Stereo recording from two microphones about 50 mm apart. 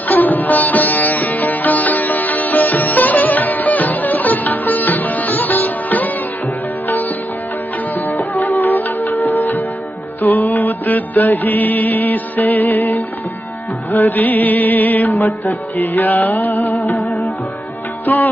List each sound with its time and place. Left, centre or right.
0.1 s sitar: left
8.4 s music: left
15.0 s music: left
15.8 s music: left
16.9 s music: centre
18.0 s music: left